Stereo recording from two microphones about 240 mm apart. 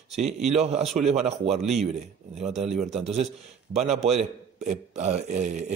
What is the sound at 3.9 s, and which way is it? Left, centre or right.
Speech, right.